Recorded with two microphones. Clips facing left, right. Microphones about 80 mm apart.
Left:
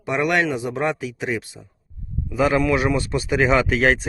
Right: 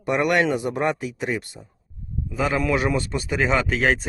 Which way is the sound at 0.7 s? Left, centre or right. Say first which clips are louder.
Even; centre.